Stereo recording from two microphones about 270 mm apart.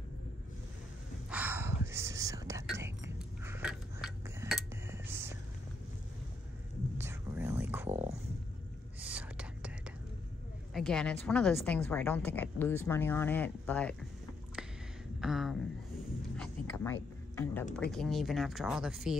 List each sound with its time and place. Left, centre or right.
1.3 s whispering: centre
2.8 s a sound: centre
7.0 s whispering: centre
7.9 s dog: right
9.0 s whispering: centre
10.7 s a woman's voice: centre
15.1 s a sound: centre
17.9 s speech: centre